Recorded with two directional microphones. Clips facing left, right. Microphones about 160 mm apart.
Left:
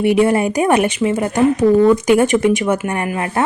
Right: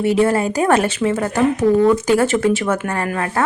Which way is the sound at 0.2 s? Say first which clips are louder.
Left 2 dB; 15° left (ahead or behind).